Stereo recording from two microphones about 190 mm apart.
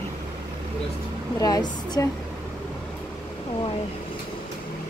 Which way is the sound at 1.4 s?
20° left (ahead or behind).